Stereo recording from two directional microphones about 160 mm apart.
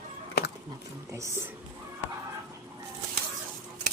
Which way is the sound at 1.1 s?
15° right (ahead or behind).